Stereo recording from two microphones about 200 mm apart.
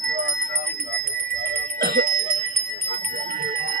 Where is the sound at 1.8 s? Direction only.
50° right (ahead or behind).